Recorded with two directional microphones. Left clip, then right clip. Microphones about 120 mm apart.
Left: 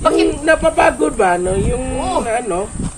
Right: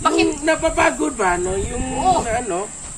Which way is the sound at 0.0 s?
Centre (ahead or behind).